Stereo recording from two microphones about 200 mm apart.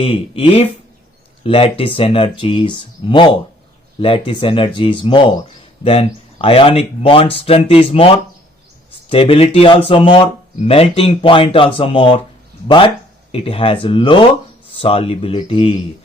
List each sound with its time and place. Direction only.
0.0 s speech: 30° left (ahead or behind)